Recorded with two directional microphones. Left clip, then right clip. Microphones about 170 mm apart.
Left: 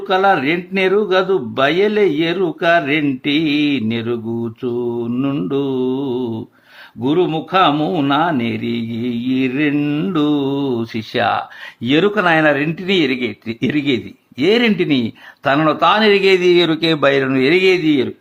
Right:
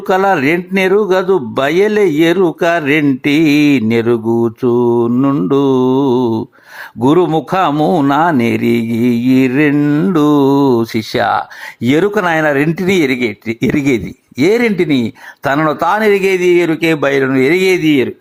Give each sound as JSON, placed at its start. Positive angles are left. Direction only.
{"t": 0.1, "sound": "speech", "side_deg": -30}
{"t": 9.7, "sound": "mantra", "side_deg": -5}
{"t": 10.1, "sound": "speech", "side_deg": -35}
{"t": 13.1, "sound": "speech", "side_deg": -20}
{"t": 15.4, "sound": "speech", "side_deg": -30}
{"t": 16.0, "sound": "speech", "side_deg": -20}